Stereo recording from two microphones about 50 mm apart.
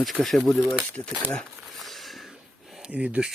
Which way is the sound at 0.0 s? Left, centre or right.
Centre.